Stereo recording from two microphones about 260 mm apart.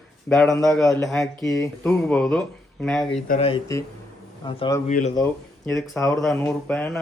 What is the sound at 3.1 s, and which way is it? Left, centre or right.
Speech, left.